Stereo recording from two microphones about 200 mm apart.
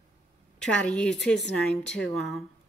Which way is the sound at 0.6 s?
5° left (ahead or behind).